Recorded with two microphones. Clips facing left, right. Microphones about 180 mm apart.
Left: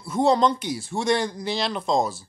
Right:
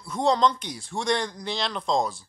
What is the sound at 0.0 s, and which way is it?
Speech, 5° left (ahead or behind).